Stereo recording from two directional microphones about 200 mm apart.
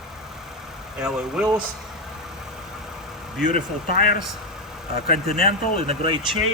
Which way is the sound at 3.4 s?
45° left (ahead or behind).